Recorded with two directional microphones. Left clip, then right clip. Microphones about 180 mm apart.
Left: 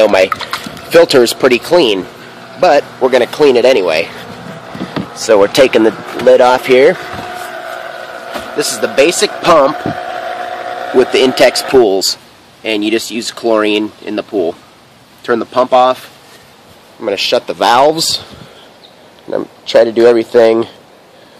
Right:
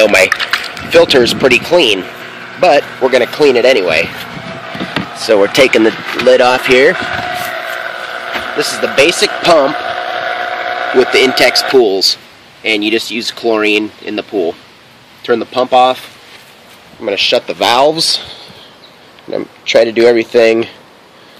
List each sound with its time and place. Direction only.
0.0 s speech: centre (ahead or behind)
0.7 s speech: 15° left (ahead or behind)
2.6 s speech: 5° left (ahead or behind)
8.5 s speech: 10° left (ahead or behind)
9.4 s a sound: 5° left (ahead or behind)
11.0 s speech: 20° left (ahead or behind)
12.6 s speech: 5° left (ahead or behind)
17.0 s speech: 5° left (ahead or behind)
19.3 s speech: 5° left (ahead or behind)